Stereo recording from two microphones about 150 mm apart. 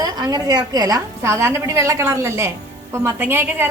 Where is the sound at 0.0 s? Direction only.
25° right (ahead or behind).